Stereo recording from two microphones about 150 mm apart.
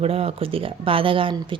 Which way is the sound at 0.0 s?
40° right (ahead or behind).